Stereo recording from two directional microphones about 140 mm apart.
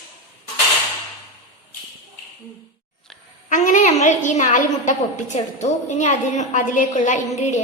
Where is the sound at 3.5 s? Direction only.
60° left (ahead or behind).